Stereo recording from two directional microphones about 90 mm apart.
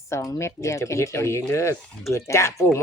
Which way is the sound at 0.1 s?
35° left (ahead or behind).